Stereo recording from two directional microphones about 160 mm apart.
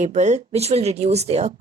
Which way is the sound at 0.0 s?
45° right (ahead or behind).